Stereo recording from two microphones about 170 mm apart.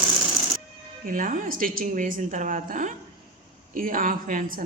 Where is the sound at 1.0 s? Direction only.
50° right (ahead or behind).